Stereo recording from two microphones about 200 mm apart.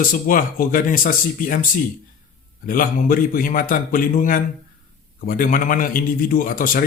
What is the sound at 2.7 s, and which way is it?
A man's voice, 45° left (ahead or behind).